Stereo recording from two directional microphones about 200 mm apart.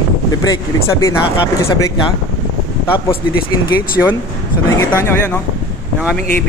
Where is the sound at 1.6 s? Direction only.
15° left (ahead or behind).